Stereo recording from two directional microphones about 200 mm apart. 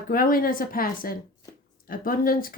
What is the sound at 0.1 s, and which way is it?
Speech, 45° left (ahead or behind).